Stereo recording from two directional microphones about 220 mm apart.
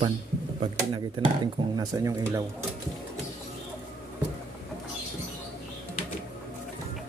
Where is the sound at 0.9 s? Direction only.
20° right (ahead or behind).